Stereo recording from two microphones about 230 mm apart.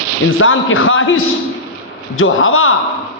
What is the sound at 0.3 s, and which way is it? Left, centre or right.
A man's voice, left.